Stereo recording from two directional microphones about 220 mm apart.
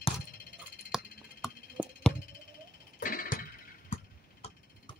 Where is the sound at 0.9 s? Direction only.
Centre (ahead or behind).